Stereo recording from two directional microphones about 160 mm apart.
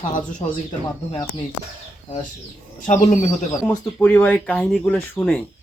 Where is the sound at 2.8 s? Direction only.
50° left (ahead or behind).